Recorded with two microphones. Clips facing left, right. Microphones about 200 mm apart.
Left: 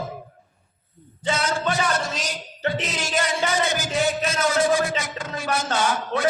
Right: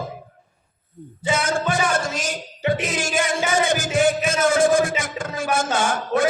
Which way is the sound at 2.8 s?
50° right (ahead or behind).